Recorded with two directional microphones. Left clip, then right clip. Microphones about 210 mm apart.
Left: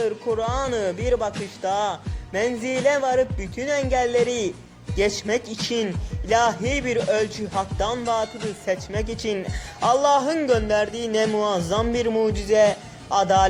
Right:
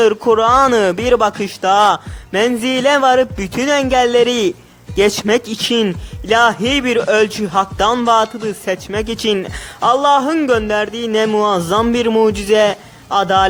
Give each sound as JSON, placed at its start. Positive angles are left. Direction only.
{"t": 0.0, "sound": "a man's voice", "side_deg": -30}